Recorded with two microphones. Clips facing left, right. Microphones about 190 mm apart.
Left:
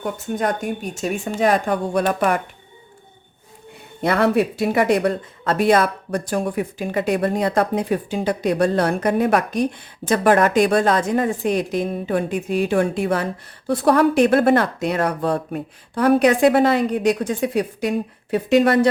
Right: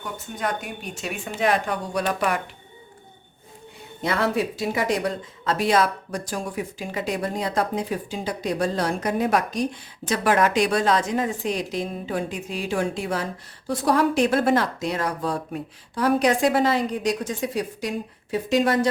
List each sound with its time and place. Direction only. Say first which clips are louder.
0.0 s speech: left 7 dB; 45° left (ahead or behind)
4.0 s speech: left 6 dB; 60° left (ahead or behind)